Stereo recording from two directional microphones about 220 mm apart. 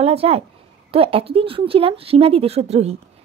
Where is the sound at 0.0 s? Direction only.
25° right (ahead or behind).